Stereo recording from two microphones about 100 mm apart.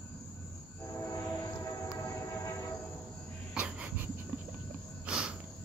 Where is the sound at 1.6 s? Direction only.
35° left (ahead or behind).